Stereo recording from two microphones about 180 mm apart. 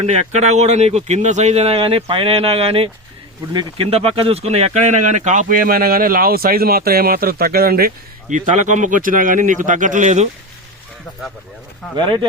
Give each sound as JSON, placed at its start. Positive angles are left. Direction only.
{"t": 0.0, "sound": "speech", "side_deg": -40}